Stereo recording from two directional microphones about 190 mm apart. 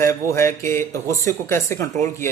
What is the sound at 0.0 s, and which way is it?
A man's voice, 15° left (ahead or behind).